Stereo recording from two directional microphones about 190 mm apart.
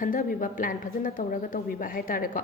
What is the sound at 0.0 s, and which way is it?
A woman's voice, 45° left (ahead or behind).